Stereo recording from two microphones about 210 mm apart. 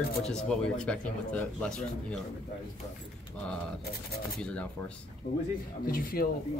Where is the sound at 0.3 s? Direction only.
5° left (ahead or behind).